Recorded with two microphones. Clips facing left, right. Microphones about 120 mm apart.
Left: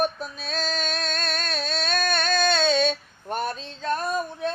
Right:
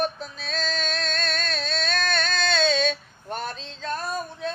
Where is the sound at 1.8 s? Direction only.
45° left (ahead or behind).